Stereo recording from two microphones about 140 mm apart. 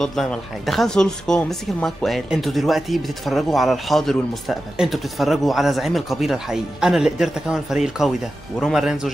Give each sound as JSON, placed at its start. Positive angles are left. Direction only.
{"t": 0.0, "sound": "speech", "side_deg": 5}